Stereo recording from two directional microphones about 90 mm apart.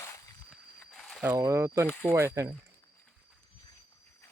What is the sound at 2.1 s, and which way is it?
Speech, 30° right (ahead or behind).